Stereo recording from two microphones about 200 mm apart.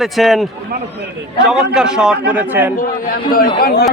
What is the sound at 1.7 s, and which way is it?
A man's voice, 5° right (ahead or behind).